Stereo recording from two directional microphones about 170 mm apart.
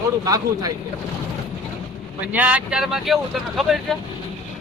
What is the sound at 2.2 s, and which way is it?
Speech, 10° right (ahead or behind).